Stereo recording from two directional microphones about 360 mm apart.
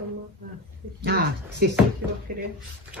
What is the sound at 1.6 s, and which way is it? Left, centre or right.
Speech, right.